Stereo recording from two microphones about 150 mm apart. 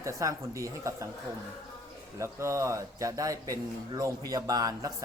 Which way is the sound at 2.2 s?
20° right (ahead or behind).